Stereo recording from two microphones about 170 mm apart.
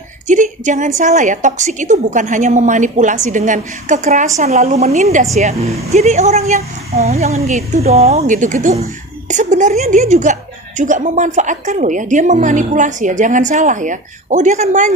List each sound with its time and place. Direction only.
0.3 s a woman's voice: 50° right (ahead or behind)